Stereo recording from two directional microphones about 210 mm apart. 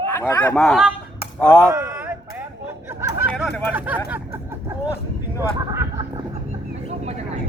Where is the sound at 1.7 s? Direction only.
10° right (ahead or behind).